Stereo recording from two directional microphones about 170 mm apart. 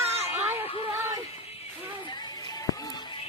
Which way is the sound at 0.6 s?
35° left (ahead or behind).